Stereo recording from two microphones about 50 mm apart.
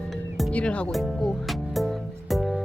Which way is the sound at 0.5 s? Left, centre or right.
Left.